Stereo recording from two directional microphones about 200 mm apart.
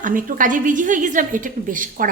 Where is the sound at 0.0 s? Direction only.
45° right (ahead or behind).